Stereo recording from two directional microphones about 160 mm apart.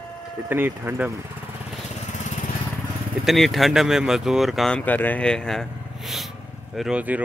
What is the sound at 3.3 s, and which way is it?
Speech, centre (ahead or behind).